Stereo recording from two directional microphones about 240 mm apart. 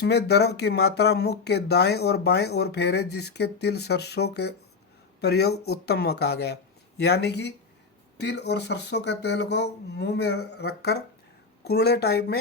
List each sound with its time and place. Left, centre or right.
0.0 s speech: left